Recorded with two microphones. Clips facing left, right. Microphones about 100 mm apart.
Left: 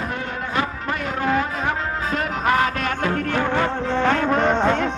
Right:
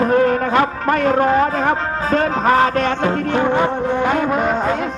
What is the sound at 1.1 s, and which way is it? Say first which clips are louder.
A man's voice: right 7 dB; 35° right (ahead or behind).